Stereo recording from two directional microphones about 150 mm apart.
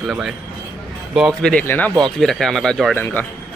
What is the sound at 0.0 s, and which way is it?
Speech, centre (ahead or behind).